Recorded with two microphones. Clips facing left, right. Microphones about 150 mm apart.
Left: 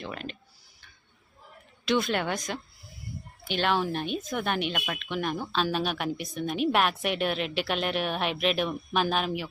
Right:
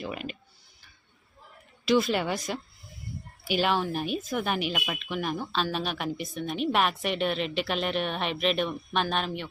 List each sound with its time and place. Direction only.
0.0 s clicking: 5° right (ahead or behind)
1.8 s a woman's voice: centre (ahead or behind)